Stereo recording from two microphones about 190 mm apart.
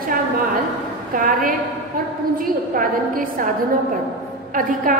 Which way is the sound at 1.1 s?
45° right (ahead or behind).